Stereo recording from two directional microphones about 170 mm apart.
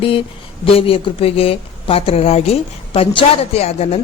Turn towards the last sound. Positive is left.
turn(degrees=40)  # may be behind; listen again after turning